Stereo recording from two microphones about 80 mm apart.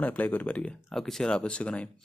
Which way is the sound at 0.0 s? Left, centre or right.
Left.